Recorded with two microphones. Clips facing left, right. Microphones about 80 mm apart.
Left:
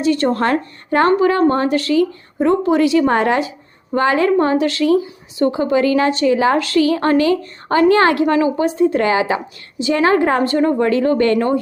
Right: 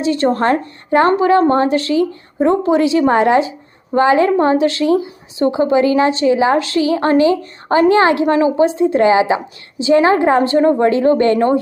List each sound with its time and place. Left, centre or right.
0.0 s a woman's voice: right